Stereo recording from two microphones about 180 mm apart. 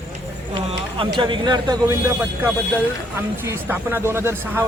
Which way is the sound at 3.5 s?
10° right (ahead or behind).